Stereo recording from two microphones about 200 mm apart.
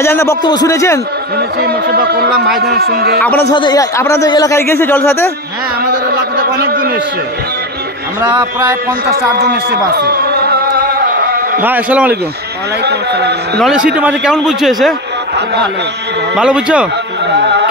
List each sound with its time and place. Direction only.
0.0 s a man's voice: 15° left (ahead or behind)
1.6 s speech: 50° right (ahead or behind)
2.4 s a man's voice: centre (ahead or behind)
2.7 s speech: 50° right (ahead or behind)
3.2 s a man's voice: 10° left (ahead or behind)
3.4 s a man's voice: 25° left (ahead or behind)
6.0 s a sound: 55° right (ahead or behind)
8.4 s speech: 20° right (ahead or behind)
9.1 s a sound: 50° right (ahead or behind)
11.6 s a man's voice: 10° right (ahead or behind)
12.8 s a man's voice: 55° right (ahead or behind)
13.6 s a man's voice: 5° right (ahead or behind)
16.3 s a man's voice: 5° right (ahead or behind)
17.4 s a sound: 60° right (ahead or behind)